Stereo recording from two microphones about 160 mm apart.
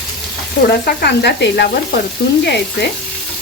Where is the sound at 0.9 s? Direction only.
90° left.